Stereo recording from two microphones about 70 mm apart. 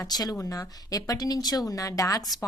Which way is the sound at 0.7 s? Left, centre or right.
Left.